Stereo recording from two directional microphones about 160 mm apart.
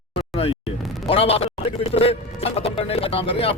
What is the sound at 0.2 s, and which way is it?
Music, 35° left (ahead or behind).